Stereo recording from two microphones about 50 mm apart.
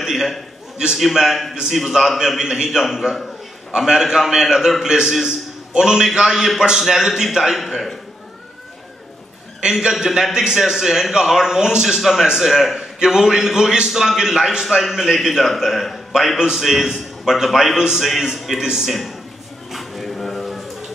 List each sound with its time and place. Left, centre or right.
0.0 s a man's voice: centre
9.6 s a man's voice: centre
9.9 s a man's voice: centre
19.7 s a sound: centre